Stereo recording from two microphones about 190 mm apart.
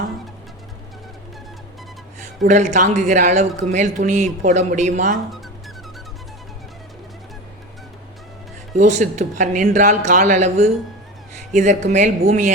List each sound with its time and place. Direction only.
2.4 s a man's voice: 40° right (ahead or behind)
8.7 s a man's voice: 40° right (ahead or behind)